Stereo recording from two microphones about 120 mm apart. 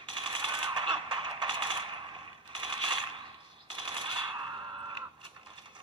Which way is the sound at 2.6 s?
40° right (ahead or behind).